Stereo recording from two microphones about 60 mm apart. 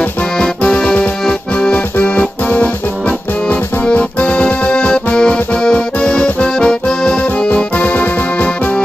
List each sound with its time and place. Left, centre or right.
0.0 s music: left
1.7 s keyboard: left